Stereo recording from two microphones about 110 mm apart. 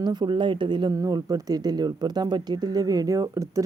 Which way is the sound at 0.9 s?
30° right (ahead or behind).